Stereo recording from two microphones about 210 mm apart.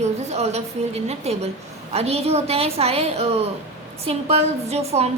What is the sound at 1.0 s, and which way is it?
A woman's voice, 30° right (ahead or behind).